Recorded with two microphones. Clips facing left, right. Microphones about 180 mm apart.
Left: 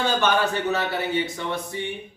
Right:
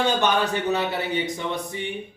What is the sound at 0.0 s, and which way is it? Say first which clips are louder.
Speech: even; 15° right (ahead or behind).